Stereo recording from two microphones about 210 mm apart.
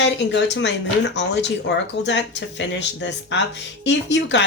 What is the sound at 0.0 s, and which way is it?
Speech, 55° left (ahead or behind).